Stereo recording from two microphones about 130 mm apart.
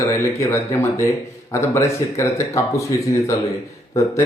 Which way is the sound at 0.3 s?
20° left (ahead or behind).